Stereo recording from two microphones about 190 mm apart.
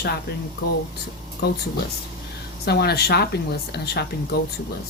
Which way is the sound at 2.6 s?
60° left (ahead or behind).